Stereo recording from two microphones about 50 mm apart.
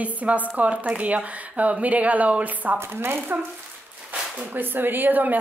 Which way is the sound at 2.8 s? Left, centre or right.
Right.